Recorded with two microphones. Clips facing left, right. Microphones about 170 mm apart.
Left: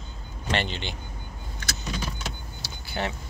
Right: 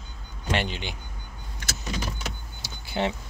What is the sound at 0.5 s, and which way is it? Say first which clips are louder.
Speech: even; 10° right (ahead or behind).